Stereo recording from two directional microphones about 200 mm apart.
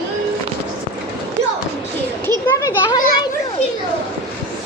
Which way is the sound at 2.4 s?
15° left (ahead or behind).